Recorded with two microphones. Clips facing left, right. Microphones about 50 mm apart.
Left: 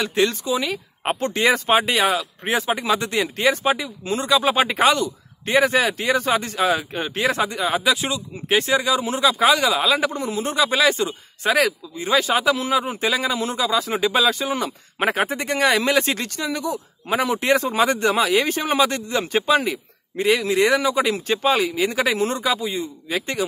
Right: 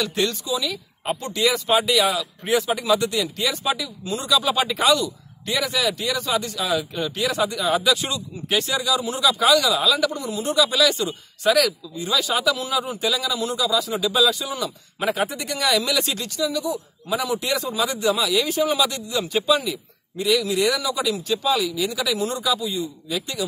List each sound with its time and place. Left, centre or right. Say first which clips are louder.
0.0 s speech: left 3 dB; left